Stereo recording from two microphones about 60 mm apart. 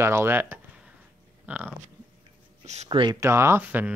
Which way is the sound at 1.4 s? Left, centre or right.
Right.